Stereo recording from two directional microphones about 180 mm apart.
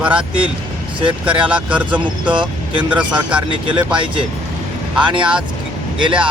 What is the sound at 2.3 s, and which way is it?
Speech, 25° right (ahead or behind).